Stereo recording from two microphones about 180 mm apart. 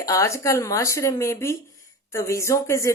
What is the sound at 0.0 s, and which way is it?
Speech, 15° left (ahead or behind).